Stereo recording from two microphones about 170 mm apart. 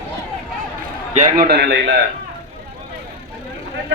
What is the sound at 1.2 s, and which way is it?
Speech, 55° right (ahead or behind).